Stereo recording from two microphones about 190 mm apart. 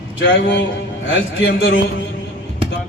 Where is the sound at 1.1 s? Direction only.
75° left (ahead or behind).